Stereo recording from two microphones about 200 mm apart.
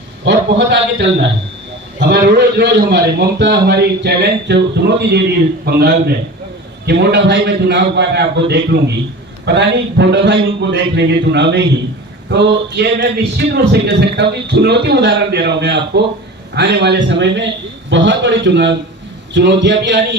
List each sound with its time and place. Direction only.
0.3 s a man's voice: 60° right (ahead or behind)